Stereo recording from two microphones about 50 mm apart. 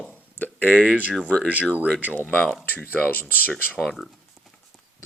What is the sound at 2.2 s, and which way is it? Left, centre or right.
Speech, left.